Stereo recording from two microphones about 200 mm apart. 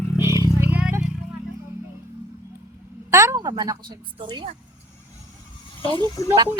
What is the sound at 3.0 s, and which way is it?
A woman's voice, 15° right (ahead or behind).